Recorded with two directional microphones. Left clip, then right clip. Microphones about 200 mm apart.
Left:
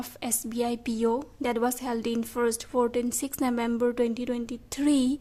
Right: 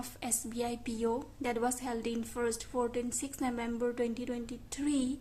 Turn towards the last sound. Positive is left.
turn(degrees=45)  # may be behind; listen again after turning